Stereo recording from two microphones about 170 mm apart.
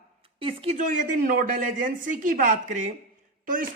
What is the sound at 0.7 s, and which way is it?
A woman's voice, 50° right (ahead or behind).